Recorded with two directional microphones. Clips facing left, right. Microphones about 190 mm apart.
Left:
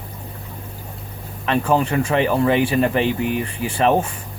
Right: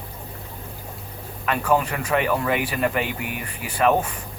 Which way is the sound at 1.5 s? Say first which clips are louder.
Left 3 dB; 25° left (ahead or behind).